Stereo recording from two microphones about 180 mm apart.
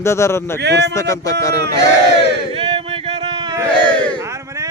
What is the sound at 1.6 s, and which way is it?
Battle cry, 70° right (ahead or behind).